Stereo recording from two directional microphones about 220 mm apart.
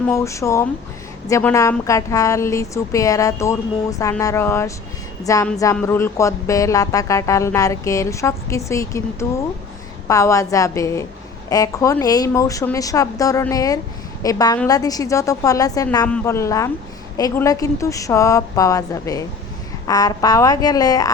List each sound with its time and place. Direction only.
0.1 s a woman's voice: 15° left (ahead or behind)